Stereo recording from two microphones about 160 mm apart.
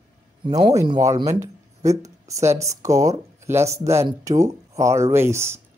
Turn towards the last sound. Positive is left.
turn(degrees=-15)  # may be behind; listen again after turning